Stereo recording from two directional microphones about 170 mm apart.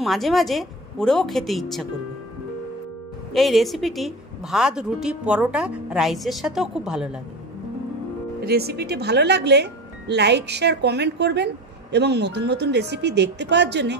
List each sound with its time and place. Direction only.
0.0 s a woman's voice: centre (ahead or behind)
3.3 s a woman's voice: centre (ahead or behind)
8.4 s speech: 70° right (ahead or behind); by 13.9 s 85° right